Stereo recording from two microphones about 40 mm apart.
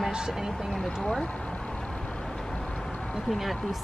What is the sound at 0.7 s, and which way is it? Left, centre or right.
Speech, centre.